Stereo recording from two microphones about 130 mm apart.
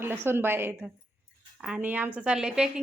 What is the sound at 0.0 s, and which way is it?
A woman's voice, 20° right (ahead or behind).